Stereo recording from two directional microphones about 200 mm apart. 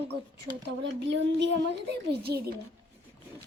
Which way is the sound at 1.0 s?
65° right (ahead or behind).